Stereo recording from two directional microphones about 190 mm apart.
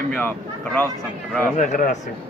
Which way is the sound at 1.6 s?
45° left (ahead or behind).